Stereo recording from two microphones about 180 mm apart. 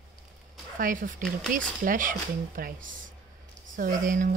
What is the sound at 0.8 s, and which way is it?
Speech, 50° right (ahead or behind).